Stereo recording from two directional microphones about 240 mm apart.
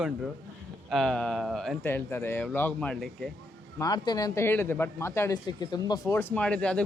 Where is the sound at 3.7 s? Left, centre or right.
Centre.